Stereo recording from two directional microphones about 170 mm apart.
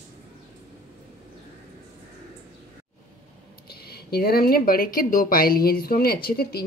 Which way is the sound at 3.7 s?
65° left (ahead or behind).